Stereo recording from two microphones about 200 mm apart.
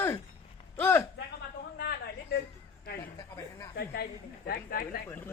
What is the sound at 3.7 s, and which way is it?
Speech, 50° left (ahead or behind).